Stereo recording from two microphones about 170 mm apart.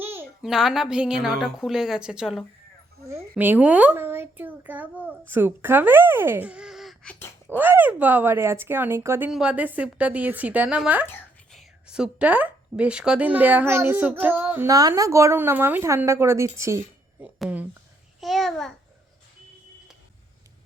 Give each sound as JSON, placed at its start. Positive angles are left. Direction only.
{"t": 0.0, "sound": "a sound", "side_deg": -15}
{"t": 0.4, "sound": "a woman's voice", "side_deg": 0}
{"t": 3.1, "sound": "a woman's voice", "side_deg": -15}
{"t": 7.5, "sound": "a woman's voice", "side_deg": -10}
{"t": 16.6, "sound": "a sound", "side_deg": -15}
{"t": 17.2, "sound": "a woman's voice", "side_deg": -5}